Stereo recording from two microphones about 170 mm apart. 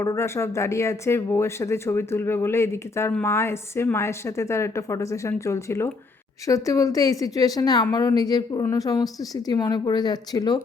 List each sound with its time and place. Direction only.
0.0 s a woman's voice: 15° left (ahead or behind)